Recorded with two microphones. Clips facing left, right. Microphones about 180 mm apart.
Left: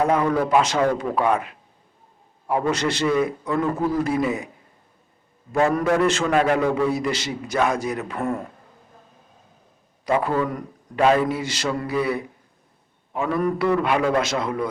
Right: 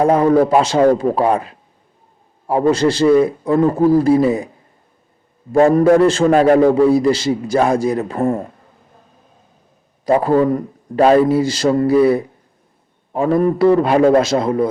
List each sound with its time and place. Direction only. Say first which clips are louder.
0.0 s a man's voice: right 8 dB; 35° right (ahead or behind)
5.5 s a man's voice: right 9 dB; 35° right (ahead or behind)
10.1 s a man's voice: right 8 dB; 35° right (ahead or behind)